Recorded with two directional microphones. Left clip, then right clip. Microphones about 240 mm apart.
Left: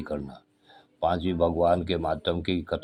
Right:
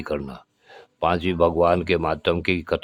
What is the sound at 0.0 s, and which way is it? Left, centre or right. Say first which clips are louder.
Speech: right 6 dB; right.